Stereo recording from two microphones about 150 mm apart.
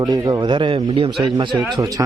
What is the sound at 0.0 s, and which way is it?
A man's voice, 25° right (ahead or behind).